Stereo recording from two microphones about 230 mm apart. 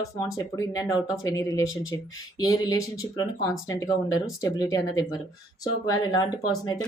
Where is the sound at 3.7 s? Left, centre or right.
Centre.